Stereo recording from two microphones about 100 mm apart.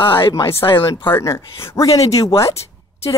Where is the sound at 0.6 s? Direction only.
60° left (ahead or behind).